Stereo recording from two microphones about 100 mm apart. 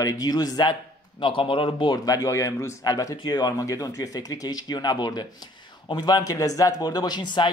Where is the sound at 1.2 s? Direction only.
60° left (ahead or behind).